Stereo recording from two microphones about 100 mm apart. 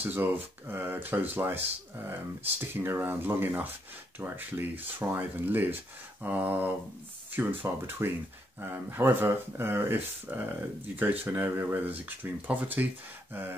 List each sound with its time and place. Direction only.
0.0 s speech: 20° right (ahead or behind)